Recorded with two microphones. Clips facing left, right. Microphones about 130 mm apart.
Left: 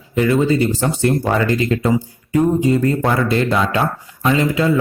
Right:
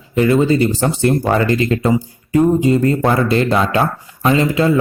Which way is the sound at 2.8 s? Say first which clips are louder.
Right 2 dB; 40° right (ahead or behind).